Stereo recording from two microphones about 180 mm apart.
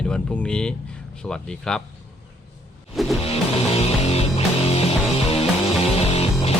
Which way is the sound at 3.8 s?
35° left (ahead or behind).